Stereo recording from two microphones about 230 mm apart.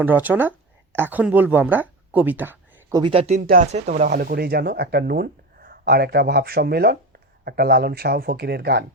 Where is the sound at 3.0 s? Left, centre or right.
Right.